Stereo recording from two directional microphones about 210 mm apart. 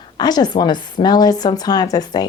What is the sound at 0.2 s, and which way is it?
Speech, 20° left (ahead or behind).